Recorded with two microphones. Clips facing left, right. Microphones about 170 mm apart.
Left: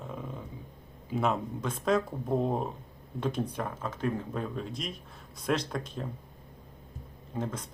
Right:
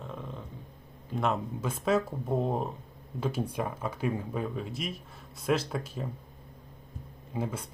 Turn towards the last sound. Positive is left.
turn(degrees=-10)  # may be behind; listen again after turning